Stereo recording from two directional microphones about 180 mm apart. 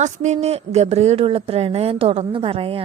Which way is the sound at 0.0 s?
40° right (ahead or behind).